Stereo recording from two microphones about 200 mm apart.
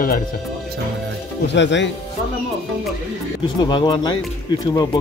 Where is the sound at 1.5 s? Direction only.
65° left (ahead or behind).